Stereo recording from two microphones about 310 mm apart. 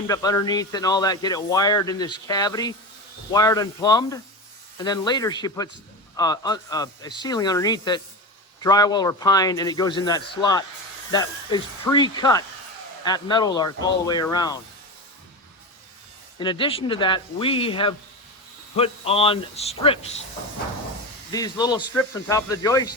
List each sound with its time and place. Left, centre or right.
0.1 s speech: centre
16.4 s a man's voice: centre
21.3 s speech: centre